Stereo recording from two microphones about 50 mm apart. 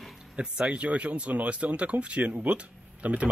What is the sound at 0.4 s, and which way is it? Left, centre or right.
Speech, right.